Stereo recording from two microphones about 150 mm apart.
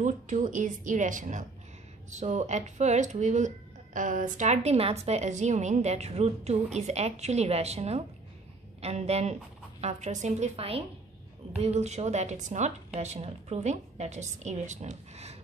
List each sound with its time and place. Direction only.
0.0 s a woman's voice: 55° right (ahead or behind)